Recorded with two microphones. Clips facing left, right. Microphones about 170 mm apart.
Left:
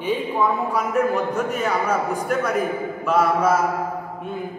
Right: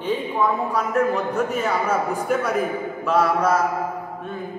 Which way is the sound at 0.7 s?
5° left (ahead or behind).